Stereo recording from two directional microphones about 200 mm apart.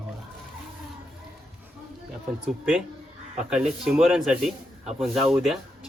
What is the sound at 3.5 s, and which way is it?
Speech, 5° right (ahead or behind).